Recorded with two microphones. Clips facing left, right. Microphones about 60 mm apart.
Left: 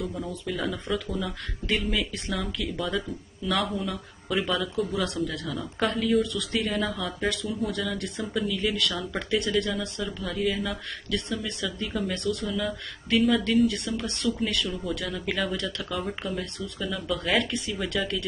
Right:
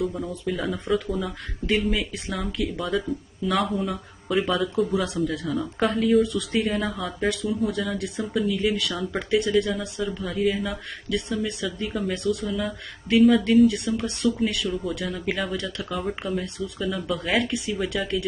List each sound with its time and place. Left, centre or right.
0.0 s speech: centre
5.8 s speech: centre
6.2 s speech: right
6.6 s speech: centre
11.1 s speech: centre